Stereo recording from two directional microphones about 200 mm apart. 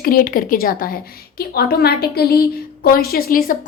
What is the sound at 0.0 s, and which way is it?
A woman's voice, 45° left (ahead or behind).